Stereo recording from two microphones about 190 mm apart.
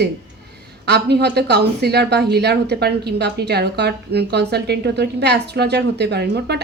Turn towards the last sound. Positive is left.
turn(degrees=-60)  # may be behind; listen again after turning